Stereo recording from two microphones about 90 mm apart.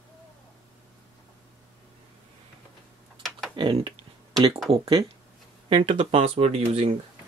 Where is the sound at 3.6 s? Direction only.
80° right.